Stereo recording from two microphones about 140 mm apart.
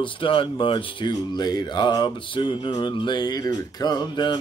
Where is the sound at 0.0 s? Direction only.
40° left (ahead or behind).